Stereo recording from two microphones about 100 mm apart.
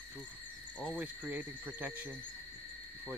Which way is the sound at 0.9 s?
15° right (ahead or behind).